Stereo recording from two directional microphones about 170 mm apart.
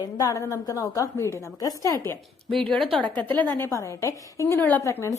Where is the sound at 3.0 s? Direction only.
30° right (ahead or behind).